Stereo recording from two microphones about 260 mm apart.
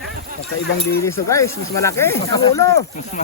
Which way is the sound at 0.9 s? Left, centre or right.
Centre.